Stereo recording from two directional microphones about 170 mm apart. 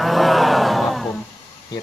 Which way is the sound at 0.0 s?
Centre (ahead or behind).